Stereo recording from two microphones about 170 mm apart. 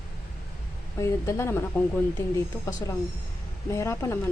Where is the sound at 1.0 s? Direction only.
15° left (ahead or behind).